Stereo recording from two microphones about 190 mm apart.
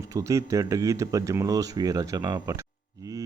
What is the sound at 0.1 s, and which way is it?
Speech, 15° right (ahead or behind).